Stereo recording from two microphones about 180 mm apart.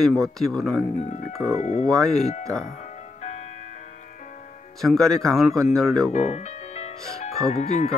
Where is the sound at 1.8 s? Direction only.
Centre (ahead or behind).